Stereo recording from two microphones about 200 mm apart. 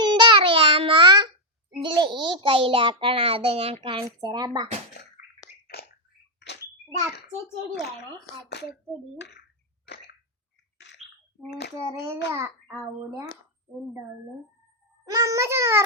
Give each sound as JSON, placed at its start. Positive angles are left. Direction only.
{"t": 0.0, "sound": "a sound", "side_deg": -20}
{"t": 1.8, "sound": "a child's voice", "side_deg": -25}
{"t": 5.2, "sound": "a sound", "side_deg": 50}
{"t": 7.7, "sound": "speech", "side_deg": 55}
{"t": 9.8, "sound": "cough", "side_deg": 55}
{"t": 10.9, "sound": "bathtub", "side_deg": 60}
{"t": 12.3, "sound": "a child's voice", "side_deg": -10}
{"t": 15.0, "sound": "a child's voice", "side_deg": -15}